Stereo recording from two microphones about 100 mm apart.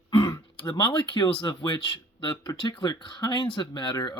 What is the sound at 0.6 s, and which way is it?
Speech, 50° left (ahead or behind).